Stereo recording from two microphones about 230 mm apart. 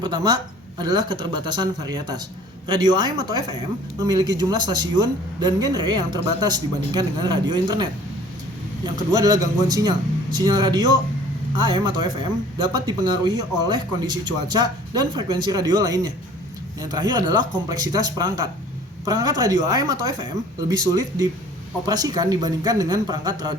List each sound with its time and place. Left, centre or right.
0.0 s a man's voice: centre
9.6 s a man's voice: centre